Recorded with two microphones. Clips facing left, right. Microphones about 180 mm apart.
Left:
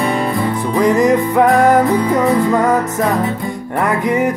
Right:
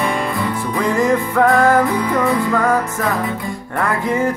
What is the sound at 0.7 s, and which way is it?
Music, 20° left (ahead or behind).